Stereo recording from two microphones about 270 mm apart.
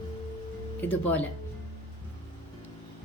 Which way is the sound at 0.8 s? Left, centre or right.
Centre.